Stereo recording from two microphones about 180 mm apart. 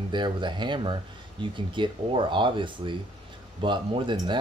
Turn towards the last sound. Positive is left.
turn(degrees=-30)  # may be behind; listen again after turning